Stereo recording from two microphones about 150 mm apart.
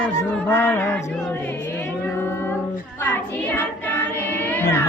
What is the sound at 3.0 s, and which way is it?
Child singing, 15° left (ahead or behind).